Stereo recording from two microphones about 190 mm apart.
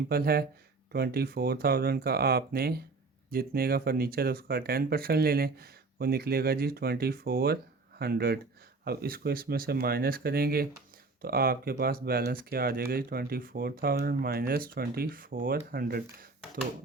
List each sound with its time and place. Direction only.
0.1 s speech: 50° right (ahead or behind)